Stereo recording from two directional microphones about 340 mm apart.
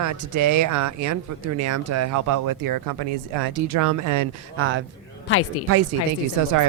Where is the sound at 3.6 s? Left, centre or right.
Right.